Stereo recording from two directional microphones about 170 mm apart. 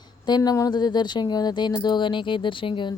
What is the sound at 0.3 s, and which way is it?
A woman's voice, 25° left (ahead or behind).